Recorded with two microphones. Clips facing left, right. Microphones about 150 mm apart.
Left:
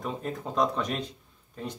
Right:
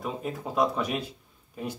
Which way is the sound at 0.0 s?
5° right (ahead or behind).